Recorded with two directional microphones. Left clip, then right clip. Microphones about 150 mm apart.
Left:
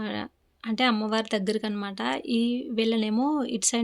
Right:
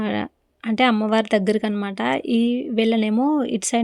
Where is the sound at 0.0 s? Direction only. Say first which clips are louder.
Right 8 dB; 45° right (ahead or behind).